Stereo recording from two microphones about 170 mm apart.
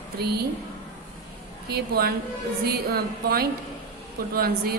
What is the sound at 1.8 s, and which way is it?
A woman's voice, 65° right (ahead or behind).